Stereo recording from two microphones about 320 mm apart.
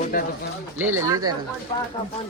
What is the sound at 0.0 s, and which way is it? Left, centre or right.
Pigeon, left.